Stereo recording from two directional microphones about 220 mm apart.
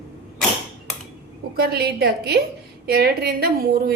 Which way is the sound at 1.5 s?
45° right (ahead or behind).